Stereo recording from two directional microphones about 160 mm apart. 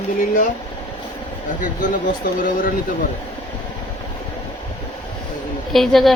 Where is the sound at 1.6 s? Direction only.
55° left (ahead or behind).